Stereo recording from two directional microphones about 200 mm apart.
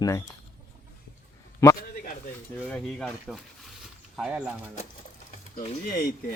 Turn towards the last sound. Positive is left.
turn(degrees=45)  # may be behind; listen again after turning